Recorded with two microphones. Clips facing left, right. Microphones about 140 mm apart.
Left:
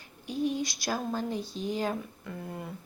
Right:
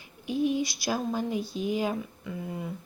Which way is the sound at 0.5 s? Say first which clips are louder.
Right 4 dB; 50° left (ahead or behind).